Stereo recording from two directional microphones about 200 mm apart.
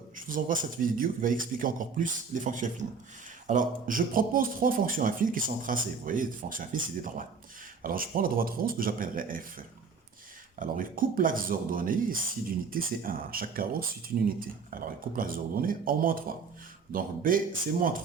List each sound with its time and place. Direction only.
0.3 s a man's voice: 40° right (ahead or behind)